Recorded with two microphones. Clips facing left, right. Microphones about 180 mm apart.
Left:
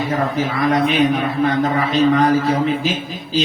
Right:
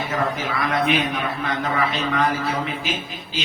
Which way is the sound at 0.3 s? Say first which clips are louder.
Left 6 dB; 40° left (ahead or behind).